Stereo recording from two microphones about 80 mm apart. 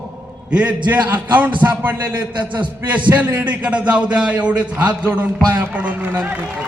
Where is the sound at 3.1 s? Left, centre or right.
Right.